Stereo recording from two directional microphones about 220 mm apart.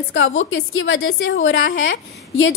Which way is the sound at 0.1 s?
60° left (ahead or behind).